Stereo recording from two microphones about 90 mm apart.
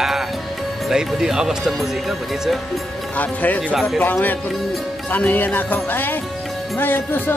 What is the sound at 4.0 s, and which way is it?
Music, 20° left (ahead or behind).